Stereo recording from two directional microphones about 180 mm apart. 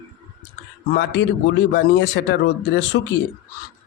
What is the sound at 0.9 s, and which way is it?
A man's voice, 70° left (ahead or behind).